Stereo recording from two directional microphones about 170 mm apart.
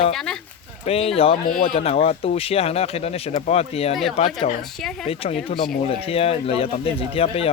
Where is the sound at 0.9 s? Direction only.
35° left (ahead or behind).